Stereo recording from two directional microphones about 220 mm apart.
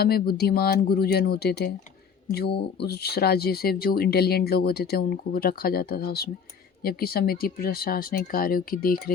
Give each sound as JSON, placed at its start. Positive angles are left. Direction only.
{"t": 0.0, "sound": "speech", "side_deg": 45}